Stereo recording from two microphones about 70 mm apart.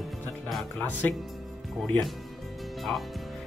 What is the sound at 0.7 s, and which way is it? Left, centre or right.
Speech, left.